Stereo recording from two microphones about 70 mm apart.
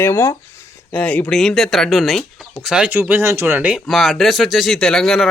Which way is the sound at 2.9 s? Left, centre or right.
Right.